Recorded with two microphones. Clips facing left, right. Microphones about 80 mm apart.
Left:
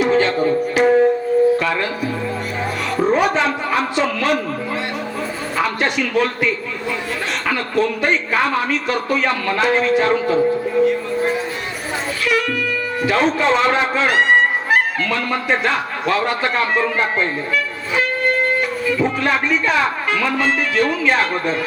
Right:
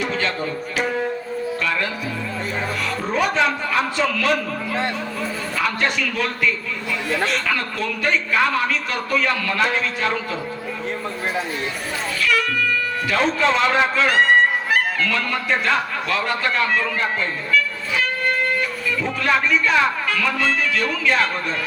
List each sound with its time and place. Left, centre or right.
0.0 s music: left
3.1 s speech: left
5.5 s speech: left
12.2 s wind instrument: left
13.1 s speech: left